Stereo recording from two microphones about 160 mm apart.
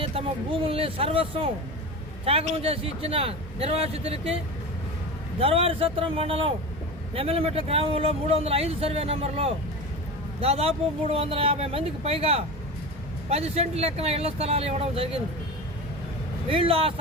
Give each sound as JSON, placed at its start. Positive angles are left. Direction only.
{"t": 0.0, "sound": "a sound", "side_deg": -35}
{"t": 0.7, "sound": "speech", "side_deg": -35}
{"t": 5.4, "sound": "speech", "side_deg": -35}
{"t": 16.5, "sound": "speech", "side_deg": -35}